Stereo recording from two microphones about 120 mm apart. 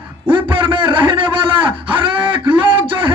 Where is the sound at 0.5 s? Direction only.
45° right (ahead or behind).